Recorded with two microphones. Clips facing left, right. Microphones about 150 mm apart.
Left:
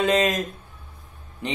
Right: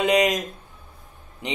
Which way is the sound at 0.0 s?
15° right (ahead or behind).